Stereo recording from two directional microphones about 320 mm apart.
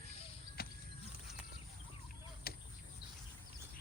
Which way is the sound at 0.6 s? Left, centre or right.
Left.